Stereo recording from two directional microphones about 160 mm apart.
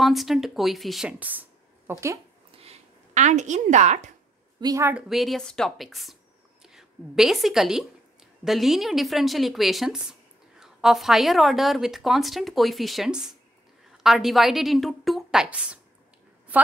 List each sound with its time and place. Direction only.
0.0 s speech: centre (ahead or behind); by 2.1 s 15° right (ahead or behind)
2.5 s a sound: 40° right (ahead or behind)
4.6 s a woman's voice: 25° right (ahead or behind)
4.8 s a woman's voice: 5° right (ahead or behind)